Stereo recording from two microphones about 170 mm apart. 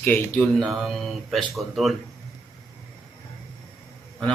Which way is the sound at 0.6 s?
Centre (ahead or behind).